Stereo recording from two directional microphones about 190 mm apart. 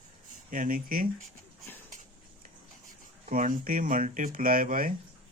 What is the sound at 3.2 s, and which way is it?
Speech, 45° right (ahead or behind).